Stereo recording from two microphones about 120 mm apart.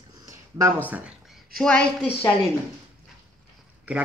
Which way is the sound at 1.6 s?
10° left (ahead or behind).